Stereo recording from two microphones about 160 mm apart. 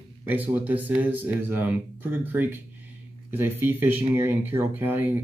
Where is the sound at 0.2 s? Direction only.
10° right (ahead or behind).